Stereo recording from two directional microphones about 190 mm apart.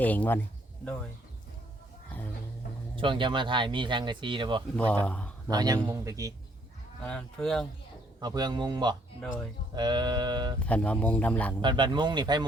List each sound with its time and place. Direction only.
0.0 s speech: 10° left (ahead or behind)
2.9 s speech: 25° right (ahead or behind)
4.8 s speech: 5° left (ahead or behind)
5.5 s speech: 20° right (ahead or behind)
7.0 s speech: 5° left (ahead or behind)
8.2 s speech: 20° right (ahead or behind)
9.2 s speech: 5° left (ahead or behind)
9.7 s speech: 20° right (ahead or behind)
10.7 s speech: 5° left (ahead or behind)
11.6 s speech: 25° right (ahead or behind)